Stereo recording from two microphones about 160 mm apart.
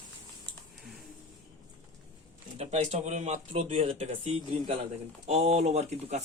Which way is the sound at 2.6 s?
45° right (ahead or behind).